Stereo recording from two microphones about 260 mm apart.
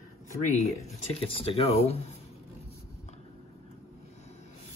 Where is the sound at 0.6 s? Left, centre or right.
Left.